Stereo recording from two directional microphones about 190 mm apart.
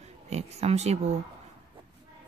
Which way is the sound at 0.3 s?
35° right (ahead or behind).